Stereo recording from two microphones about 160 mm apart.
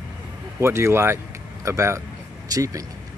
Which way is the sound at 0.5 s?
15° right (ahead or behind).